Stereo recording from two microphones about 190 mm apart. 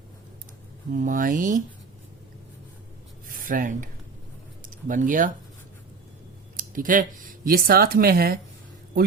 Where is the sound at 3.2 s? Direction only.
45° right (ahead or behind).